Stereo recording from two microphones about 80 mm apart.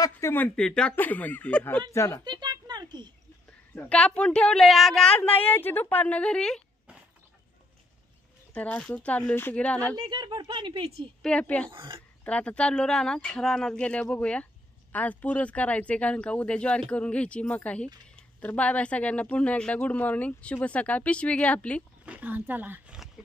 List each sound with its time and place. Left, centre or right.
0.2 s speech: left
0.6 s speech: centre
0.9 s a woman's voice: left
1.9 s speech: left
2.2 s a sound: right
3.4 s a woman's voice: centre
5.1 s a woman's voice: centre
8.5 s a woman's voice: centre
9.9 s speech: right
11.2 s speech: centre
11.7 s speech: right
12.3 s speech: centre
22.0 s a sound: centre